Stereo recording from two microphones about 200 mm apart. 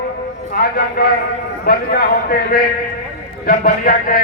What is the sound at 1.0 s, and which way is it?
A man's voice, 50° left (ahead or behind).